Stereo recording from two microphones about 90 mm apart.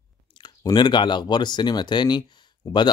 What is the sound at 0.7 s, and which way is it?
Speech, 55° left (ahead or behind).